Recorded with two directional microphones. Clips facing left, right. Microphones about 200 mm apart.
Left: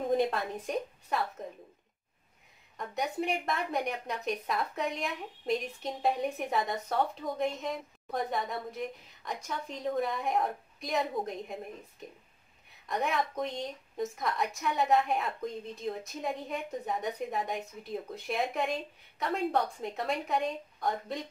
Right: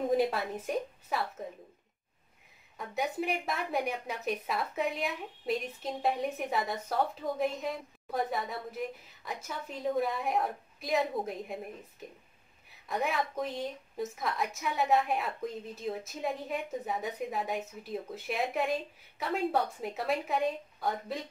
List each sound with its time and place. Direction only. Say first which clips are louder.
0.1 s a woman's voice: left 2 dB; centre (ahead or behind)
2.8 s a woman's voice: even; centre (ahead or behind)
12.8 s a woman's voice: left 1 dB; centre (ahead or behind)